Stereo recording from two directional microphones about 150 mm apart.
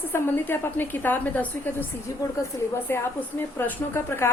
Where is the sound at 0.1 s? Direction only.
15° left (ahead or behind).